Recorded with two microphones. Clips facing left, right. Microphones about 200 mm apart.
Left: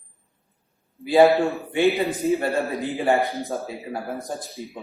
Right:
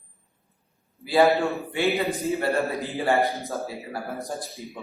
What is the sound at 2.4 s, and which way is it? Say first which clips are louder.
Speech: left 1 dB; 15° left (ahead or behind).